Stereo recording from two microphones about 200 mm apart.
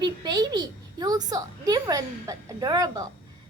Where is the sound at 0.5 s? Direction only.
20° right (ahead or behind).